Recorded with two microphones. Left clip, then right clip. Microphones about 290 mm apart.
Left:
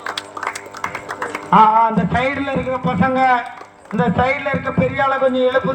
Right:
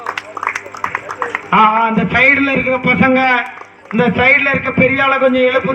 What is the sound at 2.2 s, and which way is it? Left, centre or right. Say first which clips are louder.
Speech: right 9 dB; centre.